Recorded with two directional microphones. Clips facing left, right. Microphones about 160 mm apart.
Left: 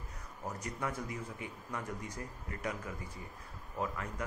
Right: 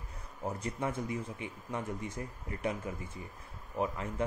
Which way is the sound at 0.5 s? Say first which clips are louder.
Right 4 dB; 25° right (ahead or behind).